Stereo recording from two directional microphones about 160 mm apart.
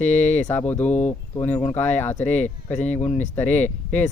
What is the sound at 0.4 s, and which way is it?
Speech, 10° left (ahead or behind).